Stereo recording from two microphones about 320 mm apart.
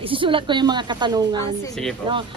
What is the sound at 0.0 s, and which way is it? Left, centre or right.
Speech, centre.